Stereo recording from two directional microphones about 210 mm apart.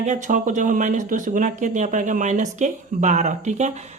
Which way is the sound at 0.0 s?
35° right (ahead or behind).